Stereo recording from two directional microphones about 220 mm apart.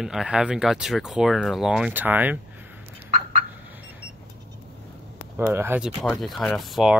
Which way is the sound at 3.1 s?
35° right (ahead or behind).